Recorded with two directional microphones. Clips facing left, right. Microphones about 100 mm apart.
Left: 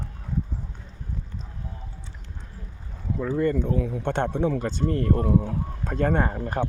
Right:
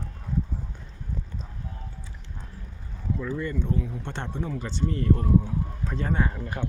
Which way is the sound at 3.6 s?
65° left (ahead or behind).